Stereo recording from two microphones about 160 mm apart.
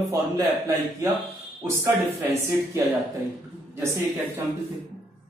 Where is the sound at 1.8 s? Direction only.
20° right (ahead or behind).